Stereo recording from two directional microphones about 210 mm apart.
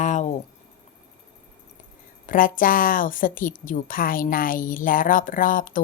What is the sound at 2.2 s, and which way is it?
A woman's voice, 40° left (ahead or behind).